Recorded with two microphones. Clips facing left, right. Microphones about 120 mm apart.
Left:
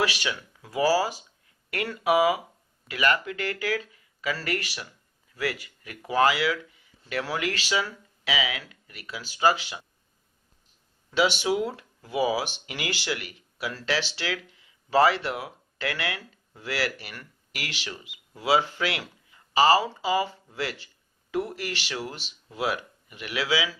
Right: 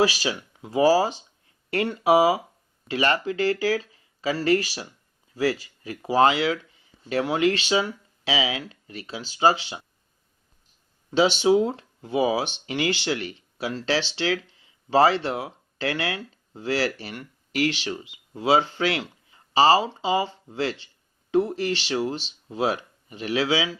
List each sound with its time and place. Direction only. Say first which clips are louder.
0.0 s speech: right 5 dB; 30° right (ahead or behind)
11.1 s speech: right 5 dB; 30° right (ahead or behind)